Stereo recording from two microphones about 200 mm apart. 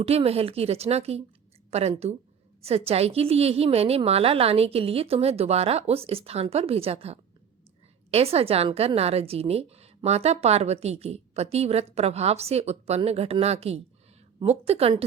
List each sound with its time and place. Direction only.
0.0 s a woman's voice: 30° right (ahead or behind)